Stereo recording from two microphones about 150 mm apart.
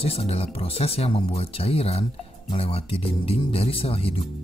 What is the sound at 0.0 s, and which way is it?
Speech, 40° left (ahead or behind).